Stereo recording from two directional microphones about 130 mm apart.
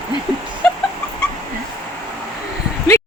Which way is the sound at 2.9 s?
15° left (ahead or behind).